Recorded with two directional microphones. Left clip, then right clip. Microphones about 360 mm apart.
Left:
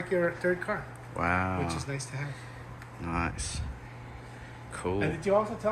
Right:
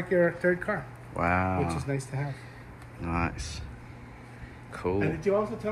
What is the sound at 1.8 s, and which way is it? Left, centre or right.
Speech, centre.